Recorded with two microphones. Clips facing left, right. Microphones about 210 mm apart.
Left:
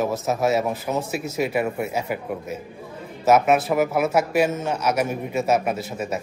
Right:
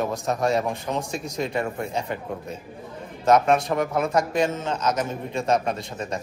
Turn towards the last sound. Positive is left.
turn(degrees=5)  # may be behind; listen again after turning